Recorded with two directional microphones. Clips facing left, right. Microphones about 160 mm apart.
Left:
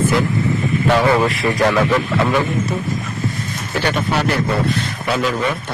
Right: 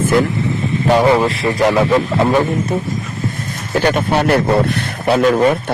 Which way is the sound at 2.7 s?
50° right (ahead or behind).